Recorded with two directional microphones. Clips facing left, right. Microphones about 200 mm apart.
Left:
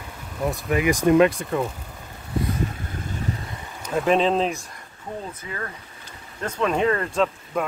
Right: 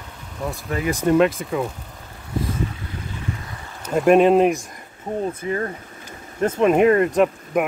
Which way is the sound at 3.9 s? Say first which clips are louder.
Right 6 dB; 10° right (ahead or behind).